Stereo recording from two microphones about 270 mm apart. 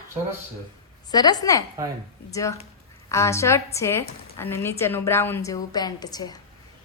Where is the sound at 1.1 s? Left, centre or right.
Centre.